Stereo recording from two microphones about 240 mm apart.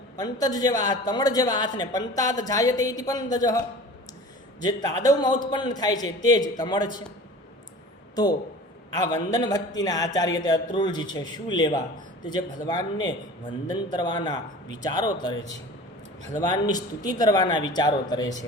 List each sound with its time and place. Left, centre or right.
0.2 s a woman's voice: centre
4.6 s a woman's voice: centre
8.1 s a woman's voice: centre